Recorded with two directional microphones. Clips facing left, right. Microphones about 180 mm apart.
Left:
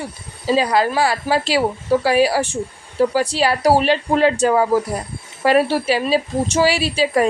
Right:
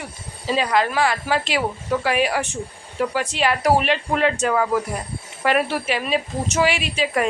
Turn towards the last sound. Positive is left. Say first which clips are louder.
# left 5 dB
turn(degrees=35)  # may be behind; listen again after turning